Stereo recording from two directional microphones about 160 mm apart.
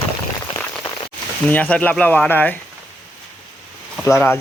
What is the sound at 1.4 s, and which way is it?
Speech, 10° left (ahead or behind).